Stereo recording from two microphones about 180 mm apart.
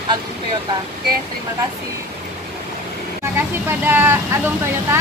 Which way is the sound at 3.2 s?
10° right (ahead or behind).